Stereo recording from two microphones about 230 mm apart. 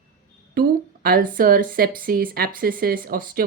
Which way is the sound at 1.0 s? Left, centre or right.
Right.